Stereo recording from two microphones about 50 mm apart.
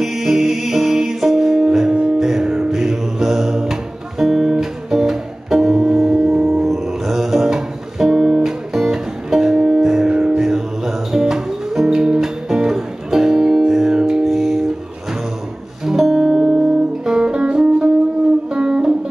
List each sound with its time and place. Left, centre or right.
0.0 s music: centre
10.4 s music: centre
15.8 s music: centre